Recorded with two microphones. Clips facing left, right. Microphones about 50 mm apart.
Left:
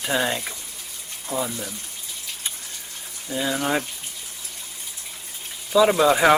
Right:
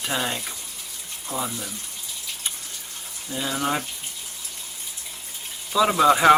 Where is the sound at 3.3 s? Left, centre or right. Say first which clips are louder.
Left 2 dB; centre.